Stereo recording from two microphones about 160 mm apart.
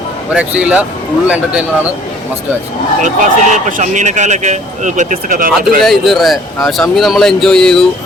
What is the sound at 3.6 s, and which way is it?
A man's voice, 55° right (ahead or behind).